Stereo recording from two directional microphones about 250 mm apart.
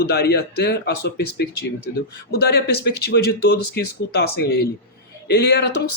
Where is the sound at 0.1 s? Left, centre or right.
Left.